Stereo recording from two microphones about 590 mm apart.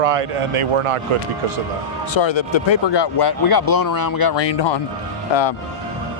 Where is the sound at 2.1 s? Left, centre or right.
Left.